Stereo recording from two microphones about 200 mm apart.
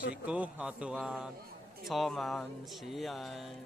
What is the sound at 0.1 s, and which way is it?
Speech, 5° right (ahead or behind).